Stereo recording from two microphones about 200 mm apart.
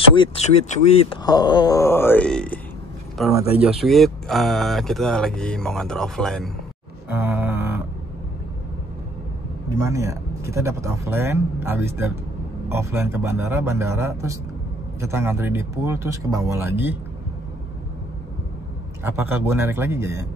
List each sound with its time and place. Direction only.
0.1 s speech: 25° left (ahead or behind)
1.2 s speech: 20° left (ahead or behind); by 6.5 s centre (ahead or behind)
7.1 s music: 10° right (ahead or behind)
9.8 s speech: 15° right (ahead or behind)
19.0 s speech: 10° right (ahead or behind)